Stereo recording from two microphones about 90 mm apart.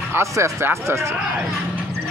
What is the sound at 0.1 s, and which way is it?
Speech, 30° right (ahead or behind).